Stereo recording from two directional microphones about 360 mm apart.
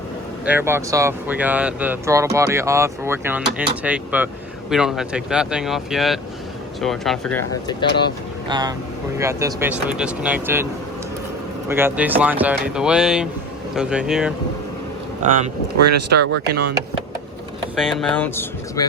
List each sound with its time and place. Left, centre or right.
0.4 s speech: centre
8.4 s speech: centre
11.7 s speech: centre
16.0 s speech: right
17.7 s speech: centre